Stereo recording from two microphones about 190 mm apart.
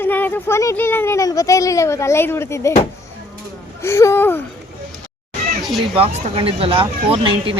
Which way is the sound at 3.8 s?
15° left (ahead or behind).